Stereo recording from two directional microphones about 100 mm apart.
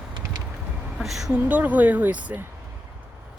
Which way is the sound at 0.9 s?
Centre (ahead or behind).